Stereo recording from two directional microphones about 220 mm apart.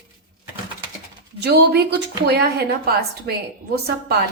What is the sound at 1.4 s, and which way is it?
A woman's voice, 45° right (ahead or behind).